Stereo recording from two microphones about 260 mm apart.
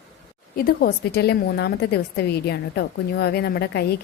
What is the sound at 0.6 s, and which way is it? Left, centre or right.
A woman's voice, left.